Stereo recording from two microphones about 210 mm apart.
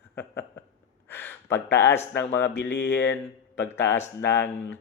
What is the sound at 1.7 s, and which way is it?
Speech, 10° left (ahead or behind).